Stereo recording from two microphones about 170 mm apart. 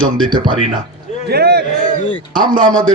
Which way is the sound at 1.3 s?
70° right (ahead or behind).